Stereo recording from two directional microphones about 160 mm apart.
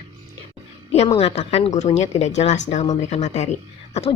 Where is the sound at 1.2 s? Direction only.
40° left (ahead or behind).